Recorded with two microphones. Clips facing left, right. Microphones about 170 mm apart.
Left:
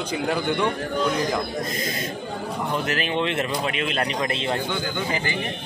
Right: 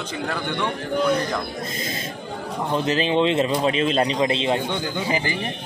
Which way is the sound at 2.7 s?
20° right (ahead or behind).